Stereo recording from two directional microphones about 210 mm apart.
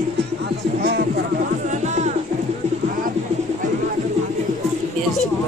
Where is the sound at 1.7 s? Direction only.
35° right (ahead or behind).